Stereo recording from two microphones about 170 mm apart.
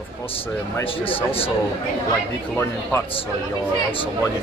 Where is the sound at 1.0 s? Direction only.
30° left (ahead or behind).